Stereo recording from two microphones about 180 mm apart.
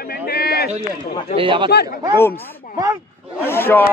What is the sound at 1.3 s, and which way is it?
Speech, 30° right (ahead or behind).